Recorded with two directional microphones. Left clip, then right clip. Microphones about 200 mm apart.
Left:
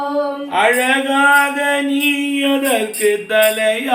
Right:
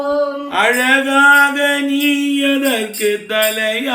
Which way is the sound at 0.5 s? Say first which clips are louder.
Right 1 dB; 25° right (ahead or behind).